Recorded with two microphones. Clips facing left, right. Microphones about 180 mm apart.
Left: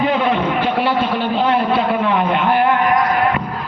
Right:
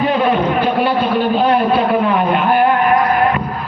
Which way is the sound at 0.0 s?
20° left (ahead or behind).